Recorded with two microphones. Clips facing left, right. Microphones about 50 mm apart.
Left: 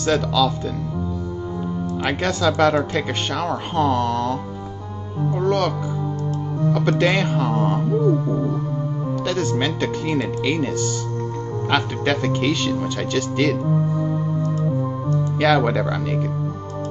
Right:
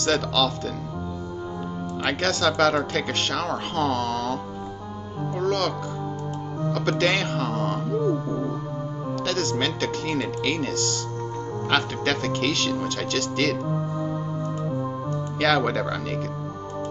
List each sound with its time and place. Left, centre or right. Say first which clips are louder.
0.0 s speech: left 4 dB; centre
2.0 s speech: left 2 dB; centre
6.7 s speech: left 4 dB; centre
15.3 s speech: left 3 dB; centre